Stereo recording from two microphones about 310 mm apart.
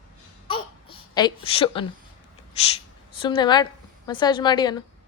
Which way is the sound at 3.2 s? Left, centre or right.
Centre.